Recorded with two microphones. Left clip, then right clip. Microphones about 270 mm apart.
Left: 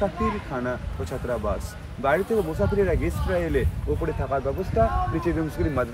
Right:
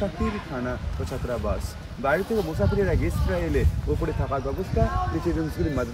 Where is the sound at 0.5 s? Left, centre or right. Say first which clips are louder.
Left 2 dB; centre.